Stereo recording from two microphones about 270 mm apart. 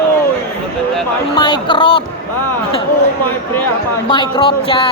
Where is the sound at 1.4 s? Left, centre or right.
Centre.